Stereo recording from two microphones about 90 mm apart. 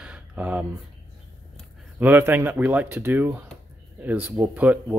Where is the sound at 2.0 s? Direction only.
20° right (ahead or behind).